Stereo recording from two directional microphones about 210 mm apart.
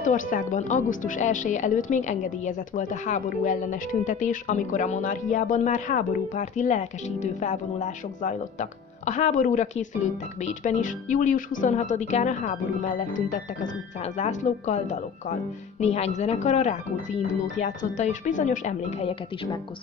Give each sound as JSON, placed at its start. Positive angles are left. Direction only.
{"t": 0.0, "sound": "a woman's voice", "side_deg": 40}
{"t": 14.0, "sound": "a woman's voice", "side_deg": 35}